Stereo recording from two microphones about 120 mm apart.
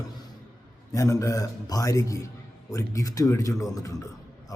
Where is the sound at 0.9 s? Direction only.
25° left (ahead or behind).